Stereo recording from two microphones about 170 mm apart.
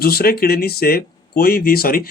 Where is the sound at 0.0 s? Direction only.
65° left (ahead or behind).